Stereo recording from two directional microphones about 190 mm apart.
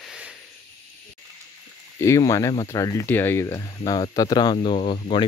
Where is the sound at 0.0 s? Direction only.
5° right (ahead or behind).